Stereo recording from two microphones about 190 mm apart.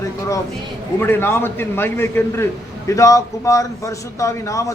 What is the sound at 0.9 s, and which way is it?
A man's voice, 10° left (ahead or behind).